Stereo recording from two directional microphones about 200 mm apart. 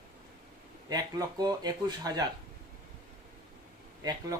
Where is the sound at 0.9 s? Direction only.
20° right (ahead or behind).